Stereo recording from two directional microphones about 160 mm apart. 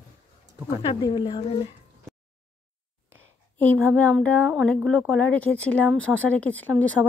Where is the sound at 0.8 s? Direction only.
25° left (ahead or behind).